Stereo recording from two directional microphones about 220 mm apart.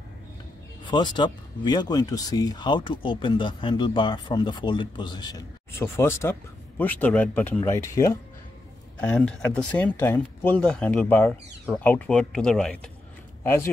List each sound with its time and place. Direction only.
0.8 s speech: 20° left (ahead or behind)